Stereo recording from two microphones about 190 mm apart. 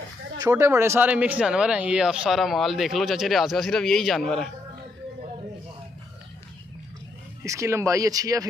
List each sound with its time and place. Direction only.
0.4 s speech: 15° right (ahead or behind); by 4.5 s centre (ahead or behind)
7.4 s speech: 15° right (ahead or behind)